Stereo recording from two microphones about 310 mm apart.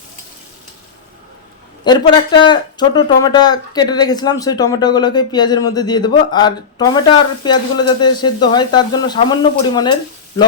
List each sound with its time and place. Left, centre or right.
1.8 s speech: centre